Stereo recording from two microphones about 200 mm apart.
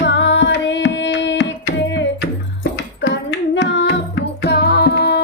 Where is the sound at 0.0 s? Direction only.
60° left (ahead or behind).